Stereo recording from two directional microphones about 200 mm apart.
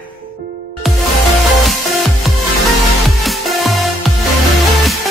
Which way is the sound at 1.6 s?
Centre (ahead or behind).